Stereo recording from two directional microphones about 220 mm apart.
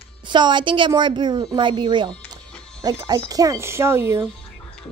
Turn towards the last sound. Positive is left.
turn(degrees=-10)  # may be behind; listen again after turning